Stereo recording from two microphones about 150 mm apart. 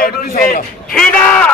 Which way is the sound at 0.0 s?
85° left.